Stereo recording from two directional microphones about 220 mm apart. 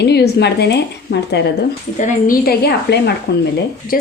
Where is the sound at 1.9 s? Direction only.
35° left (ahead or behind).